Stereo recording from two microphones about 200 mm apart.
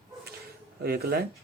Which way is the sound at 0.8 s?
50° right (ahead or behind).